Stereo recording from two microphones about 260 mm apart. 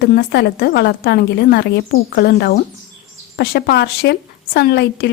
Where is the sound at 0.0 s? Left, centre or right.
Left.